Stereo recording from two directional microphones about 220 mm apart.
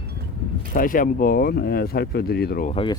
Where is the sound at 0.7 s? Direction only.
40° left (ahead or behind).